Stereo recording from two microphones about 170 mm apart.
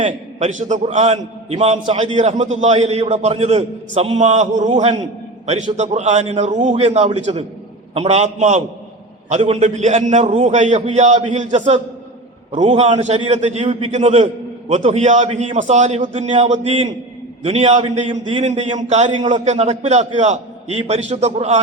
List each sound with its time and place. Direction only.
0.0 s a man's voice: 45° right (ahead or behind)